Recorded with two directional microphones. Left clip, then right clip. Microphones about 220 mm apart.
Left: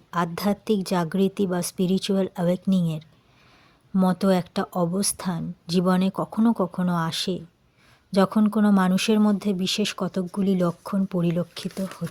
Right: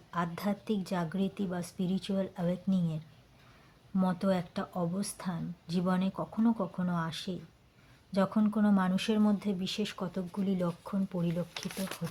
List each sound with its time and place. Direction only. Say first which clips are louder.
0.1 s speech: left 9 dB; 40° left (ahead or behind)